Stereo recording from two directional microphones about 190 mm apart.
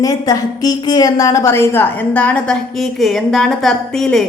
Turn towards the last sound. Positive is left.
turn(degrees=0)  # may be behind; listen again after turning